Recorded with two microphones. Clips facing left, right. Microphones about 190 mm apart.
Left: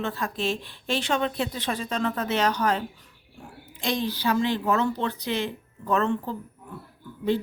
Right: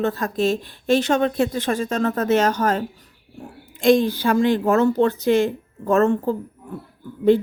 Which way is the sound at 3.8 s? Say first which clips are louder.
Right 10 dB; 50° right (ahead or behind).